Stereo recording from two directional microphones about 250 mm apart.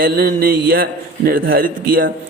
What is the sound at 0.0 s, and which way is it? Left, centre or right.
A man's voice, right.